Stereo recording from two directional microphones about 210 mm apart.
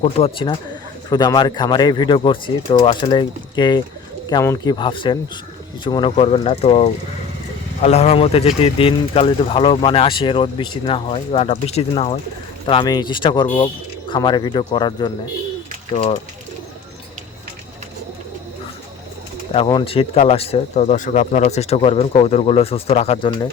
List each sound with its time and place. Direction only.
0.0 s speech: 25° left (ahead or behind)
19.5 s speech: 25° left (ahead or behind)